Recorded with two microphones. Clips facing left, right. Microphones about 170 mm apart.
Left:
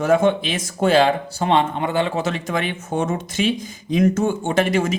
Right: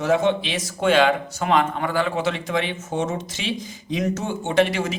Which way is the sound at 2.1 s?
45° left (ahead or behind).